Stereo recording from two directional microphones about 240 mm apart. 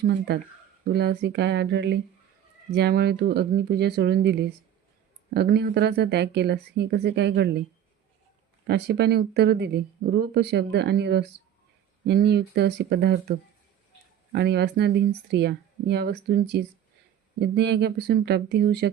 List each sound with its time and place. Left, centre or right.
0.0 s speech: right
8.6 s speech: right
14.3 s speech: right